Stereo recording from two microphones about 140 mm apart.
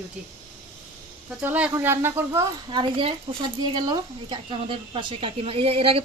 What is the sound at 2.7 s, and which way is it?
Speech, 35° right (ahead or behind).